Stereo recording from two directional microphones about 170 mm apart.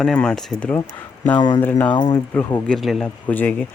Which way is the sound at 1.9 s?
25° left (ahead or behind).